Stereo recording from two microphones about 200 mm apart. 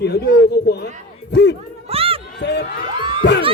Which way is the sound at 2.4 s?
60° left (ahead or behind).